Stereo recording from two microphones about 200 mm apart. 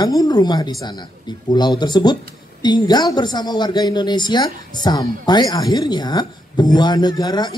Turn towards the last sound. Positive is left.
turn(degrees=20)  # may be behind; listen again after turning